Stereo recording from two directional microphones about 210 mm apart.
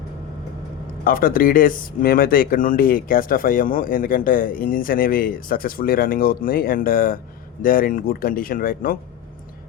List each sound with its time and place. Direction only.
1.0 s speech: 45° left (ahead or behind)